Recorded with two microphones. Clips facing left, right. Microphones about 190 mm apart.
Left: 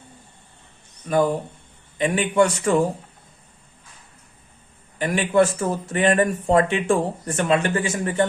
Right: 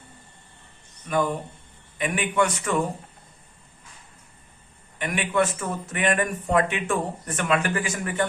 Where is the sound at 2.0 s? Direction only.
30° left (ahead or behind).